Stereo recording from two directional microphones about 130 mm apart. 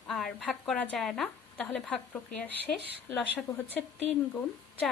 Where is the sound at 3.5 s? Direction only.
25° left (ahead or behind).